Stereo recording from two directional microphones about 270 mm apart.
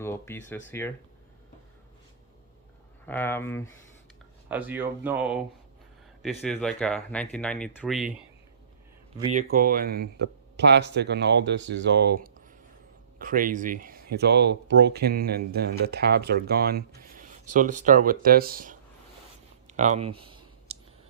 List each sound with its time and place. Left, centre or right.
0.0 s speech: centre
3.1 s speech: centre
4.4 s speech: centre
6.4 s speech: centre
9.3 s speech: right
19.7 s clicking: right